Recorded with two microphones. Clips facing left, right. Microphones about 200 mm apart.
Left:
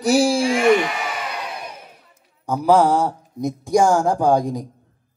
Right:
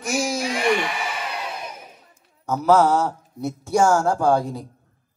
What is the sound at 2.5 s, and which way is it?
Speech, 10° left (ahead or behind).